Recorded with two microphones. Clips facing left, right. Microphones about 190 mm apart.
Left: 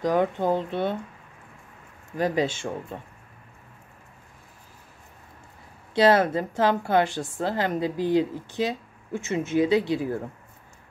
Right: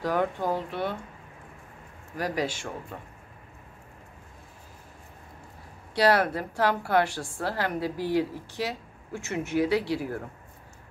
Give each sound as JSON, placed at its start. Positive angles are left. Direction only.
{"t": 0.0, "sound": "a woman's voice", "side_deg": 20}
{"t": 2.1, "sound": "a woman's voice", "side_deg": 25}
{"t": 5.9, "sound": "a woman's voice", "side_deg": 20}